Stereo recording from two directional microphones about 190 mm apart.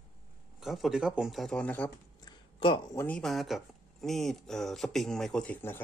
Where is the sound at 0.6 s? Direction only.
Centre (ahead or behind).